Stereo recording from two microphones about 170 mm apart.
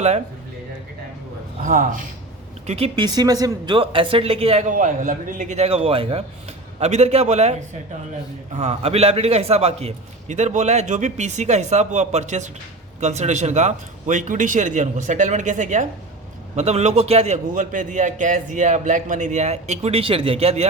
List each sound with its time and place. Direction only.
1.6 s a man's voice: 50° right (ahead or behind)
2.6 s a man's voice: 35° right (ahead or behind)